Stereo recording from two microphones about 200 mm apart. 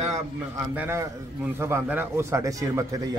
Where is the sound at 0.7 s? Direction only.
10° right (ahead or behind).